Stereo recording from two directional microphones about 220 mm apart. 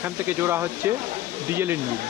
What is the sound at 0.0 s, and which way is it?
Speech, 10° right (ahead or behind).